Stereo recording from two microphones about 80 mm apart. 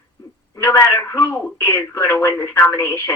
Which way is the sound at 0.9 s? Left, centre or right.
Left.